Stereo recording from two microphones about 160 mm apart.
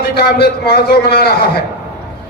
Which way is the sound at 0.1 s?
75° left (ahead or behind).